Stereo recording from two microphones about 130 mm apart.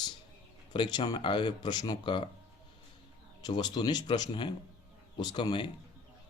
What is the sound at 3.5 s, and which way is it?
Speech, 35° left (ahead or behind).